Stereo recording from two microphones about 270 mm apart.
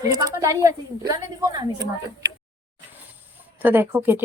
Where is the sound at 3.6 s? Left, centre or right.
Centre.